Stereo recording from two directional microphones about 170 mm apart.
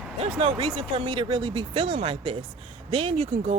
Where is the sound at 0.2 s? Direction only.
35° right (ahead or behind).